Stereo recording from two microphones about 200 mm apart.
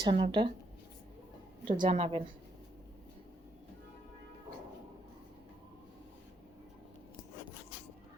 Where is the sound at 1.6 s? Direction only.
25° right (ahead or behind).